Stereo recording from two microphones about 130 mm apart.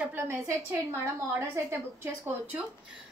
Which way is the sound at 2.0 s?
20° right (ahead or behind).